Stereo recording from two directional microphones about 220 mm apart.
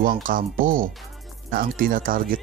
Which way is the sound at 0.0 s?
40° right (ahead or behind).